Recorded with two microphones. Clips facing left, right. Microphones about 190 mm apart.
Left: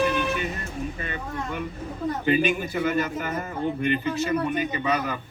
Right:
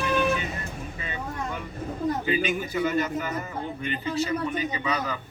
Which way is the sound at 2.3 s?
55° left (ahead or behind).